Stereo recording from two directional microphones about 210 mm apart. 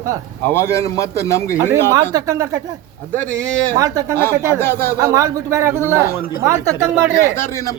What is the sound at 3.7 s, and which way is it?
A man's voice, 15° right (ahead or behind).